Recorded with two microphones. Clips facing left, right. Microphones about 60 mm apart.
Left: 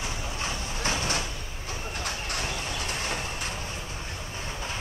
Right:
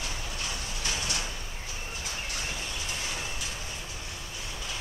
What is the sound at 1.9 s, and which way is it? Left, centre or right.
Vehicle, left.